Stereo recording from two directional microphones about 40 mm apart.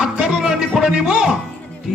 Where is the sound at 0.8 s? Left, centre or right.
Right.